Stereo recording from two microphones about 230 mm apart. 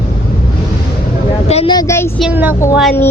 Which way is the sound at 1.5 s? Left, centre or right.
Left.